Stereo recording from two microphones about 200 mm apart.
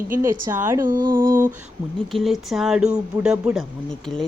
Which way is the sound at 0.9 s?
45° right (ahead or behind).